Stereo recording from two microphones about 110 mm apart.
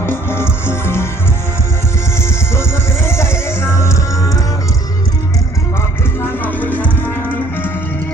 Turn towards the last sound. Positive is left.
turn(degrees=15)  # may be behind; listen again after turning